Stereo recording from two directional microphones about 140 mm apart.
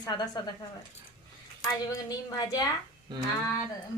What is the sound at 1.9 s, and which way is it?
Speech, 25° left (ahead or behind).